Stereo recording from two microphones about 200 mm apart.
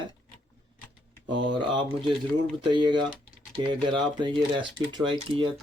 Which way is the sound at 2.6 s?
20° right (ahead or behind).